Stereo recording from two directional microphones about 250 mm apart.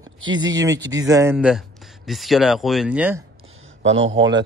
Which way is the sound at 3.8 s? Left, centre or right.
Right.